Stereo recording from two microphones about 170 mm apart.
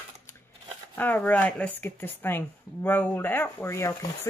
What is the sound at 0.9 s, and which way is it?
Speech, 10° left (ahead or behind).